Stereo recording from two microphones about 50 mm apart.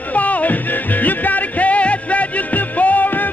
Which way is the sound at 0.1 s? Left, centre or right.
Left.